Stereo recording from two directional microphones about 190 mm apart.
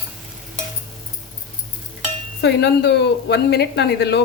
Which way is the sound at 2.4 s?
60° left (ahead or behind).